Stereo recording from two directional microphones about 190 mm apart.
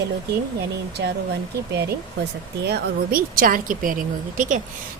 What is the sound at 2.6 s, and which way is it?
A woman's voice, 55° right (ahead or behind).